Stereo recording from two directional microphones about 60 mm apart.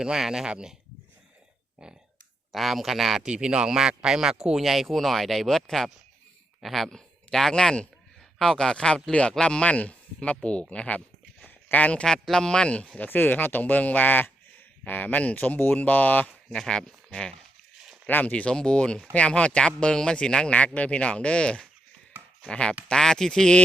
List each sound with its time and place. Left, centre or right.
0.0 s speech: centre
2.5 s speech: centre
3.2 s speech: centre; by 11.0 s left
11.4 s a sound: left
12.0 s speech: centre
13.1 s speech: left
16.5 s speech: centre
18.1 s speech: left